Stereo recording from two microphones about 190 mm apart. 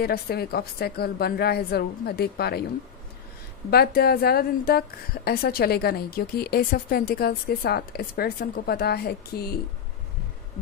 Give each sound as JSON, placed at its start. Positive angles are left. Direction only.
{"t": 0.0, "sound": "a woman's voice", "side_deg": 55}
{"t": 3.7, "sound": "a woman's voice", "side_deg": 55}